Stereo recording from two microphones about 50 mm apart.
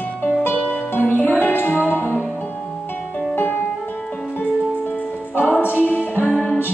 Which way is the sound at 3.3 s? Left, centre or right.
Left.